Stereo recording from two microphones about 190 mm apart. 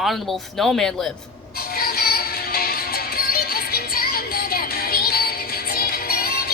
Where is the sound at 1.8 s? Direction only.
55° left (ahead or behind).